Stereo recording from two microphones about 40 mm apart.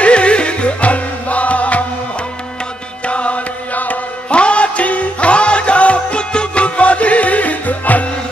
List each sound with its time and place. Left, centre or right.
0.0 s music: left
3.1 s music: left
4.3 s music: left